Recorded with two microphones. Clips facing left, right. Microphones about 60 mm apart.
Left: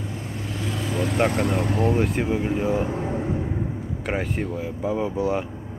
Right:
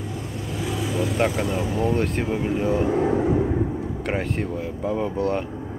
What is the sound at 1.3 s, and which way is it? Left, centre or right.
Speech, left.